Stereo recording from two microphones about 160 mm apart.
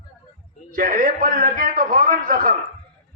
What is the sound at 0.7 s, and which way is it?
A man's voice, 60° right (ahead or behind).